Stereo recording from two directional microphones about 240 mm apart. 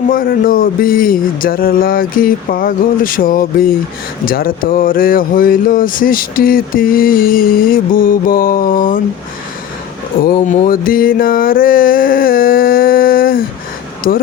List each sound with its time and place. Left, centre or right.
0.1 s speech: left
10.2 s speech: left